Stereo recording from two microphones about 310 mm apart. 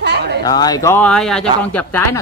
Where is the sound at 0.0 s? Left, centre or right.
Right.